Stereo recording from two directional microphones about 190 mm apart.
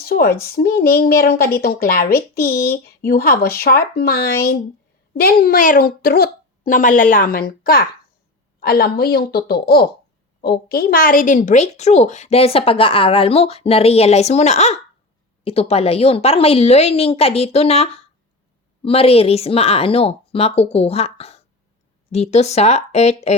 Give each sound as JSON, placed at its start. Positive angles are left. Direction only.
{"t": 0.0, "sound": "a woman's voice", "side_deg": 50}